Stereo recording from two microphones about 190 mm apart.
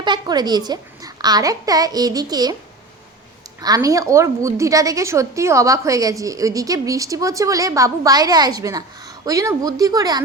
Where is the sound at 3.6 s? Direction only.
20° right (ahead or behind).